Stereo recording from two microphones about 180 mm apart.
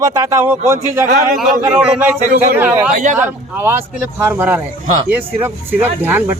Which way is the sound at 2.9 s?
45° right (ahead or behind).